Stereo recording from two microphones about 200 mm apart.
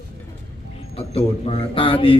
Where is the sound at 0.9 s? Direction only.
30° left (ahead or behind).